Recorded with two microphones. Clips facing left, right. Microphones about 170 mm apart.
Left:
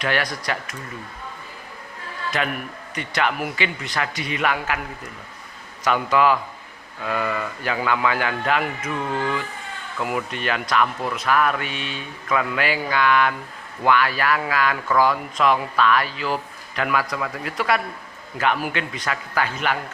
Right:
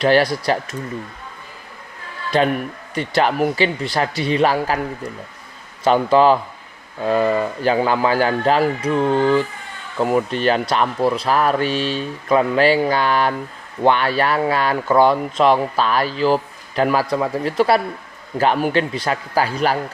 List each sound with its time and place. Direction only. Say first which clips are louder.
0.0 s speech: right 9 dB; 30° right (ahead or behind)
2.3 s speech: right 10 dB; 30° right (ahead or behind)